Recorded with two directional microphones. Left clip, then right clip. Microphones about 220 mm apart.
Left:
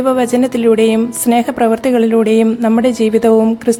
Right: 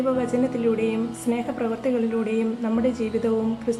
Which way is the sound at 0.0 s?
55° left (ahead or behind).